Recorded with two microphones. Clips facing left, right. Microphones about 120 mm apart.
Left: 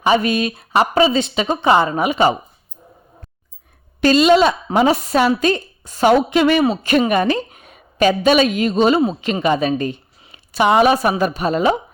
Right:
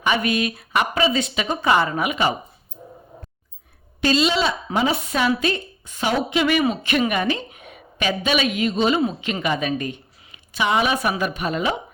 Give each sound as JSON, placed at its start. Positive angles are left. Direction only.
{"t": 0.0, "sound": "speech", "side_deg": 30}
{"t": 4.0, "sound": "a woman's voice", "side_deg": 50}
{"t": 6.1, "sound": "a woman's voice", "side_deg": 45}
{"t": 6.5, "sound": "a woman's voice", "side_deg": 30}
{"t": 10.3, "sound": "a woman's voice", "side_deg": 45}